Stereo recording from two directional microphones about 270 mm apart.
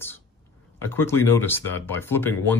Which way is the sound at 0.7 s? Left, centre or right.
Centre.